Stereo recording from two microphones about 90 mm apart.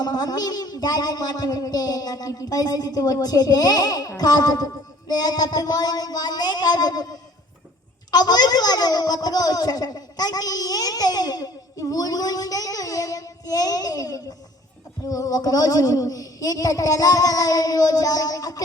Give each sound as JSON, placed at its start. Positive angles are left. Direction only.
{"t": 0.0, "sound": "a child's voice", "side_deg": 45}